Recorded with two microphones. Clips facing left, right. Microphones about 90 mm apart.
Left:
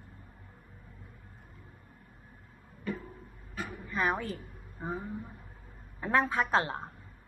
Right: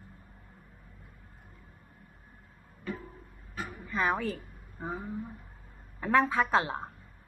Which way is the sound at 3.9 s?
5° left (ahead or behind).